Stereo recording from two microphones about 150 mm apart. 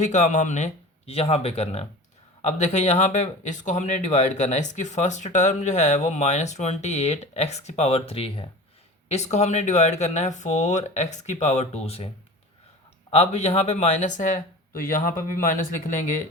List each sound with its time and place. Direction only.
0.0 s speech: 55° left (ahead or behind)